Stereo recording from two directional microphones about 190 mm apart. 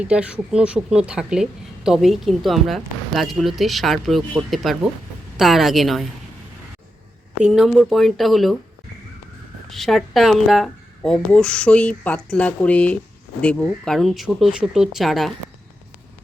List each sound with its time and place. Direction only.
0.0 s speech: 5° right (ahead or behind)
7.4 s speech: centre (ahead or behind)
9.6 s speech: centre (ahead or behind)